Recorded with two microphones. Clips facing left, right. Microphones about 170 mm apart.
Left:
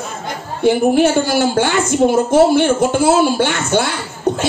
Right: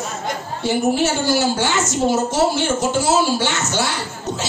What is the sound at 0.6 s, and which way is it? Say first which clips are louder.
A woman's voice: left 6 dB; 55° left (ahead or behind).